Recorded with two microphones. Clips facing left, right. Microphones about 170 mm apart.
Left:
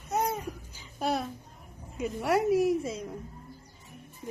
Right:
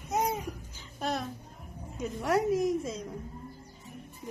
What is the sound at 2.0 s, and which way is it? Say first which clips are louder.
A woman's voice: left 1 dB; 5° left (ahead or behind).